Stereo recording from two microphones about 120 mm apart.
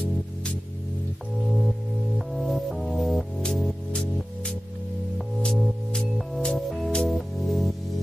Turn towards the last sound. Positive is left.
turn(degrees=0)  # may be behind; listen again after turning